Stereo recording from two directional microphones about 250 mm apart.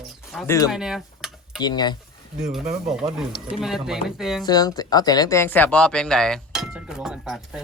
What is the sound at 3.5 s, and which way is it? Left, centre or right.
Speech, centre.